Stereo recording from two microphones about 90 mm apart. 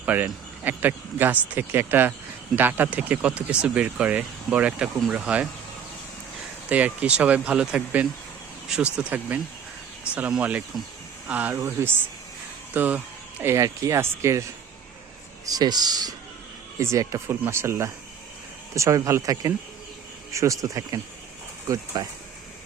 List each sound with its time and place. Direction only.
0.0 s speech: 20° right (ahead or behind)
6.7 s speech: 15° right (ahead or behind)
13.4 s speech: 35° right (ahead or behind)
15.4 s speech: 45° right (ahead or behind)
16.7 s speech: 35° right (ahead or behind)